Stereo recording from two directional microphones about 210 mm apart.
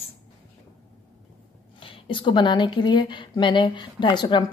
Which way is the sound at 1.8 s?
25° left (ahead or behind).